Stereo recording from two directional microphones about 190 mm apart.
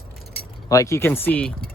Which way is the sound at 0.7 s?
15° left (ahead or behind).